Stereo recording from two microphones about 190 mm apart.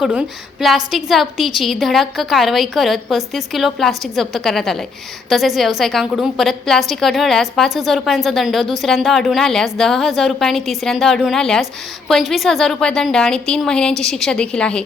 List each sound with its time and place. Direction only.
0.0 s a woman's voice: 5° right (ahead or behind)